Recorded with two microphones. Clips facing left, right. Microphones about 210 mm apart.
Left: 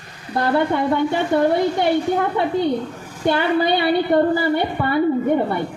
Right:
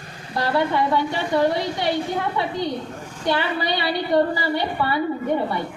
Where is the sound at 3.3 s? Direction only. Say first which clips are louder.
Left 5 dB; 55° left (ahead or behind).